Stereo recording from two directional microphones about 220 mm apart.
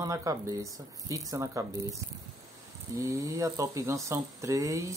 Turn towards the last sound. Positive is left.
turn(degrees=-15)  # may be behind; listen again after turning